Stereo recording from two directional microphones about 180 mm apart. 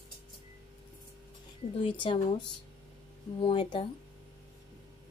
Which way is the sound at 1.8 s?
30° left (ahead or behind).